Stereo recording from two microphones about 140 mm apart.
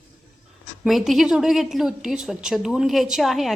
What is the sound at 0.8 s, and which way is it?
A woman's voice, centre (ahead or behind).